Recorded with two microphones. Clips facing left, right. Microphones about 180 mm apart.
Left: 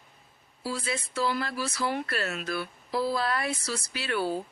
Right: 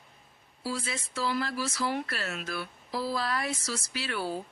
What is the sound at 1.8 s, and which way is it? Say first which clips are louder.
Speech: left 4 dB; 60° left (ahead or behind).